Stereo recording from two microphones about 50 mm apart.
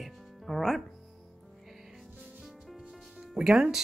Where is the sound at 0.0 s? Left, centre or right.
Centre.